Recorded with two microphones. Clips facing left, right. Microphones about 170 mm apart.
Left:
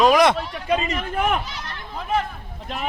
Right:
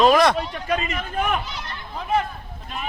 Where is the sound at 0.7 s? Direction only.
25° left (ahead or behind).